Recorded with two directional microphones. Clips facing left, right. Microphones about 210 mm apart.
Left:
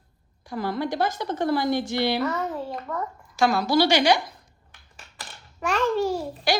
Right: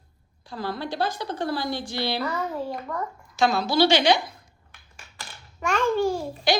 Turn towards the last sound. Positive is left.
turn(degrees=5)  # may be behind; listen again after turning